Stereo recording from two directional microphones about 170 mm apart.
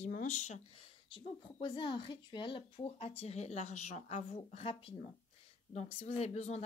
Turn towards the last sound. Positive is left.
turn(degrees=40)  # may be behind; listen again after turning